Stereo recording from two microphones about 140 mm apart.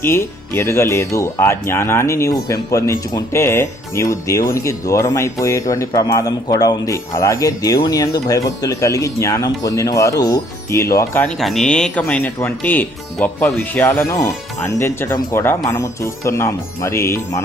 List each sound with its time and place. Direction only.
0.0 s speech: 20° left (ahead or behind)
11.3 s speech: centre (ahead or behind); by 17.4 s 20° left (ahead or behind)